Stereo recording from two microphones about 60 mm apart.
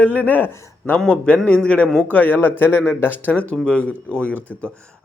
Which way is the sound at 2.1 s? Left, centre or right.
Left.